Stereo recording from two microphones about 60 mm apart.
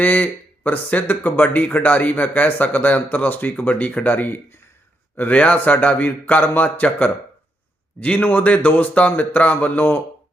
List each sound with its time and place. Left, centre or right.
0.0 s speech: left